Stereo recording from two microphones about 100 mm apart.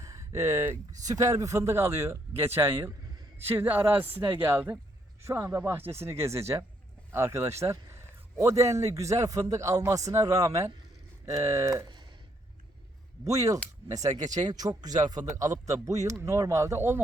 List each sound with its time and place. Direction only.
0.0 s a sound: 30° right (ahead or behind)
1.0 s a man's voice: 35° right (ahead or behind)
13.2 s a man's voice: 35° right (ahead or behind)